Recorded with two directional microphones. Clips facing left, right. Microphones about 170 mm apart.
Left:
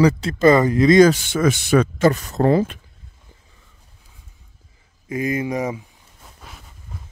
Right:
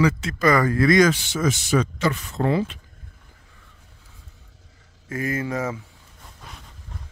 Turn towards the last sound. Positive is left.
turn(degrees=5)  # may be behind; listen again after turning